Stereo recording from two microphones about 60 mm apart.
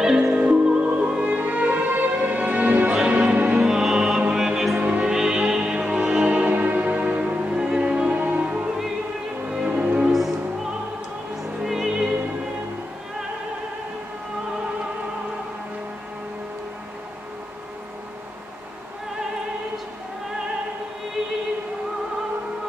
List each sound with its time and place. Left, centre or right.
0.0 s music: centre
1.3 s music: right
3.5 s music: centre
4.7 s music: right
5.1 s music: centre
6.2 s music: right
10.1 s music: centre
11.6 s opera: centre